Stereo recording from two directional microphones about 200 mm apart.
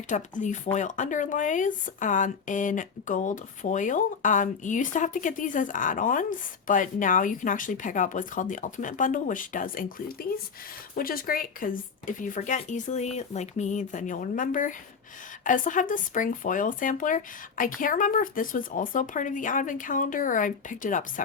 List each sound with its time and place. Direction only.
0.1 s speech: 40° left (ahead or behind)